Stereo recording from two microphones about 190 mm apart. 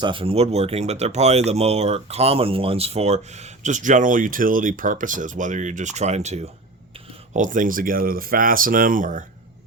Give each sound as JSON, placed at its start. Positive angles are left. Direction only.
{"t": 0.0, "sound": "speech", "side_deg": -25}